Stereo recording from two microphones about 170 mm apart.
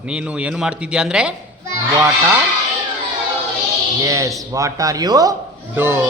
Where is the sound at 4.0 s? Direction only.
20° right (ahead or behind).